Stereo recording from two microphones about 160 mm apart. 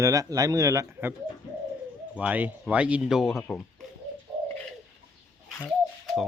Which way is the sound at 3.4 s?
10° left (ahead or behind).